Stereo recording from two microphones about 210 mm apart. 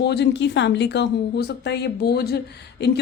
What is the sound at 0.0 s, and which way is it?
A woman's voice, 55° left (ahead or behind).